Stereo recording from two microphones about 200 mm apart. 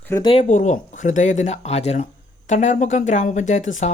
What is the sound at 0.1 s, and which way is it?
Speech, 25° left (ahead or behind).